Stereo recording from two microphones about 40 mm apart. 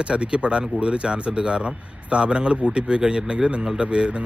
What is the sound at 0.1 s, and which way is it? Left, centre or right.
Speech, right.